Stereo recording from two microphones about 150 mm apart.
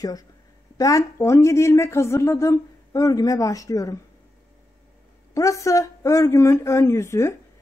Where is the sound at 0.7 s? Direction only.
20° left (ahead or behind).